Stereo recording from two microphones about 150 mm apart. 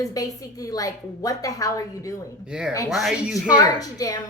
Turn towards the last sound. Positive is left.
turn(degrees=25)  # may be behind; listen again after turning